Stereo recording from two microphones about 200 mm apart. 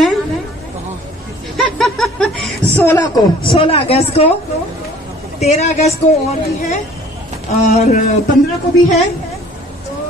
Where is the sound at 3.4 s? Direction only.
25° left (ahead or behind).